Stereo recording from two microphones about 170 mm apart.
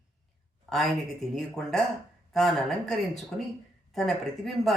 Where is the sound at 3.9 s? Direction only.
Centre (ahead or behind).